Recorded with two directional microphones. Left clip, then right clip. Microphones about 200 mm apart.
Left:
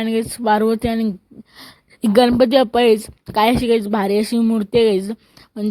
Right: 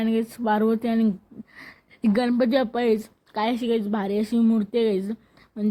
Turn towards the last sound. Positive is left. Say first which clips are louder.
# left 4 dB
turn(degrees=50)  # may be behind; listen again after turning